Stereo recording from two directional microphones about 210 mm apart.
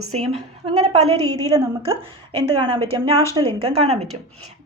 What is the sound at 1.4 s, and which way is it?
Speech, 15° right (ahead or behind).